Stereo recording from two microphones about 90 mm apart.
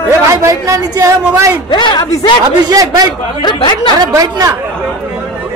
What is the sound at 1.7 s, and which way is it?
Speech, 55° left (ahead or behind).